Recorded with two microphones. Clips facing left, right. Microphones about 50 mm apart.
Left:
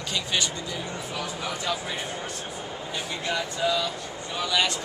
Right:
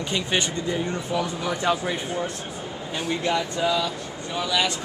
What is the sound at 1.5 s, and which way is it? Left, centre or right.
Speech, right.